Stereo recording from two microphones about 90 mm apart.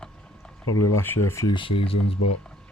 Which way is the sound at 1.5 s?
80° left.